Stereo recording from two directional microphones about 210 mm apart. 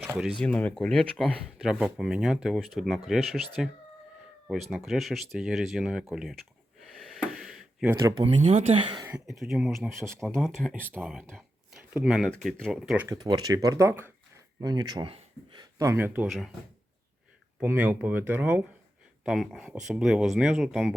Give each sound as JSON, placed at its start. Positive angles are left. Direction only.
{"t": 0.1, "sound": "speech", "side_deg": -5}
{"t": 6.8, "sound": "a sound", "side_deg": 0}
{"t": 7.9, "sound": "speech", "side_deg": -15}
{"t": 8.2, "sound": "speech", "side_deg": -25}
{"t": 9.0, "sound": "speech", "side_deg": 0}
{"t": 13.1, "sound": "speech", "side_deg": -20}
{"t": 15.8, "sound": "speech", "side_deg": -10}
{"t": 17.6, "sound": "speech", "side_deg": -10}